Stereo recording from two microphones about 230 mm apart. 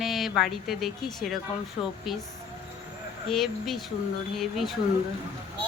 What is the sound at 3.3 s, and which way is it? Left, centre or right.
A woman's voice, centre.